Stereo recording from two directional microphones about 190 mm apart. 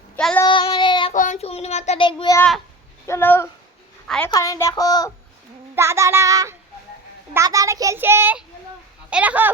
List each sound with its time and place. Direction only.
0.2 s child singing: 5° left (ahead or behind)
0.4 s child singing: 25° left (ahead or behind)
1.1 s a sound: 40° left (ahead or behind)
2.0 s a child's voice: 20° left (ahead or behind)
3.1 s a woman's voice: 10° left (ahead or behind)
4.3 s speech: 15° left (ahead or behind)
5.7 s child singing: 15° right (ahead or behind)
7.3 s a child's voice: 15° right (ahead or behind)